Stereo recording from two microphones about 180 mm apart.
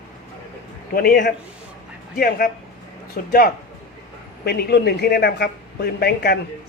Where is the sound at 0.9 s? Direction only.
55° left (ahead or behind).